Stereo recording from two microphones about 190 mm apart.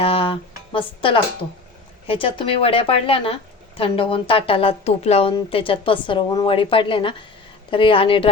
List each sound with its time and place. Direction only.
0.0 s speech: 30° left (ahead or behind)